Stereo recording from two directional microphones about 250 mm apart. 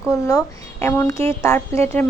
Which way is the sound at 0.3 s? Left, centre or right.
Centre.